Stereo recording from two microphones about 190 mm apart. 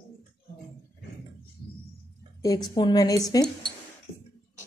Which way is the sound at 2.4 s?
20° left (ahead or behind).